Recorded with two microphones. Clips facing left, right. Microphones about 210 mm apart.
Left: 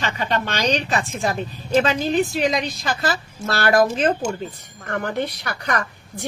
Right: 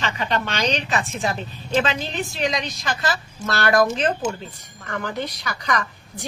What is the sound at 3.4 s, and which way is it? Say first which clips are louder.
Speech: left 1 dB; 35° left (ahead or behind).